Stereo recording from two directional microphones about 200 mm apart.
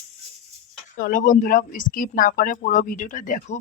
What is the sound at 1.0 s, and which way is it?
Speech, 40° left (ahead or behind).